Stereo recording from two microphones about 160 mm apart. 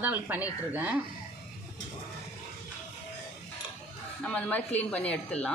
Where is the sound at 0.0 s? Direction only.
10° right (ahead or behind).